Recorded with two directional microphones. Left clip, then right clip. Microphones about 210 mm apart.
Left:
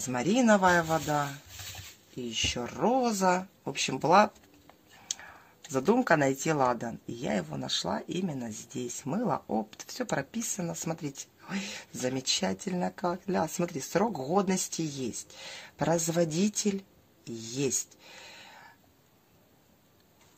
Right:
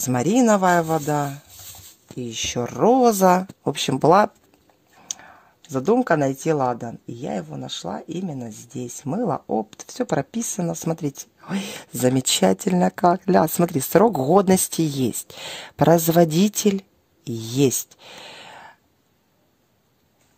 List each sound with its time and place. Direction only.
0.0 s speech: 55° right (ahead or behind)